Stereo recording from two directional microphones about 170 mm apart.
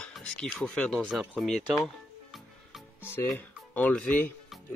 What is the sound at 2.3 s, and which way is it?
Music, centre (ahead or behind).